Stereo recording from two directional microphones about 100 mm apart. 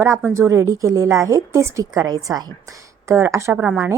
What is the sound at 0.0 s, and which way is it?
A woman's voice, 20° right (ahead or behind).